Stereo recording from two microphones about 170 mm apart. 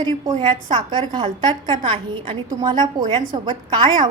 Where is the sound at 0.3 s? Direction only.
30° right (ahead or behind).